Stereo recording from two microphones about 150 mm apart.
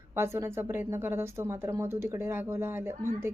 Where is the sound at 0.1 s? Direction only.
15° right (ahead or behind).